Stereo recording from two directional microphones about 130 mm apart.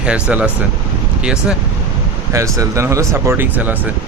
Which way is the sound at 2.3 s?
25° right (ahead or behind).